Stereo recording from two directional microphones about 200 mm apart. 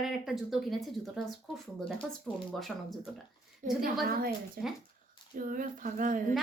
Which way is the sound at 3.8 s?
45° right (ahead or behind).